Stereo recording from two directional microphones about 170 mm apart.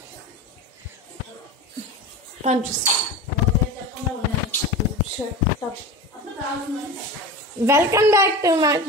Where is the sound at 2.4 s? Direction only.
45° right (ahead or behind).